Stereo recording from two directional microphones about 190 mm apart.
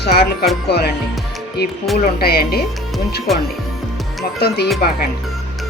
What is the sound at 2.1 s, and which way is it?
Speech, 55° left (ahead or behind).